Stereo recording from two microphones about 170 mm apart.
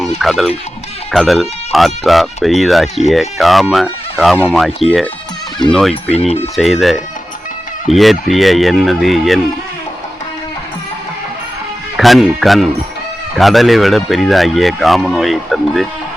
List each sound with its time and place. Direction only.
0.2 s speech: centre (ahead or behind)
6.1 s speech: 35° left (ahead or behind)
6.6 s speech: centre (ahead or behind)
11.9 s speech: centre (ahead or behind)